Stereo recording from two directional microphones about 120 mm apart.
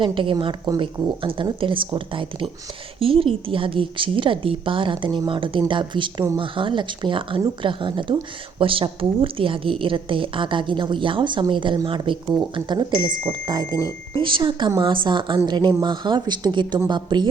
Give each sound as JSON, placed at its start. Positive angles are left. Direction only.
{"t": 0.0, "sound": "speech", "side_deg": -45}
{"t": 13.7, "sound": "speech", "side_deg": 25}
{"t": 14.2, "sound": "speech", "side_deg": -45}